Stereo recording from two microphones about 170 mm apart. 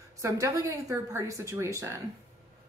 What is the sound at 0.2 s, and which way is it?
Speech, 20° right (ahead or behind).